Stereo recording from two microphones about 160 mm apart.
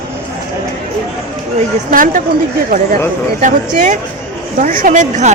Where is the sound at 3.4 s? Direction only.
50° right (ahead or behind).